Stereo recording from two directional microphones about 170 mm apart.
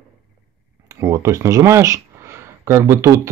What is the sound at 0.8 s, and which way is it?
Speech, 20° right (ahead or behind).